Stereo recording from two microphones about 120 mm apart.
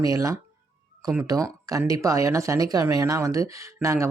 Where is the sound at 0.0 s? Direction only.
25° right (ahead or behind).